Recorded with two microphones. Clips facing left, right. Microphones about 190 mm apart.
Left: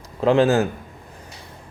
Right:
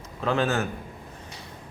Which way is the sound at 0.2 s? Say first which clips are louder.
Left 8 dB; 30° left (ahead or behind).